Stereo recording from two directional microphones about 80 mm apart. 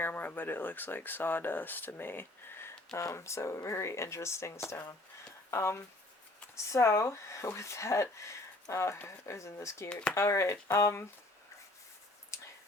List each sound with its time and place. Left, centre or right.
0.0 s speech: left
2.9 s speech: left
3.2 s speech: left